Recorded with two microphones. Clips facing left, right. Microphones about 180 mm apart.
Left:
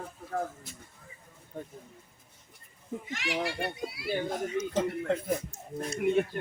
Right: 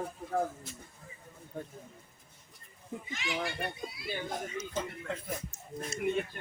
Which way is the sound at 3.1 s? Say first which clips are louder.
Left 3 dB; 80° left.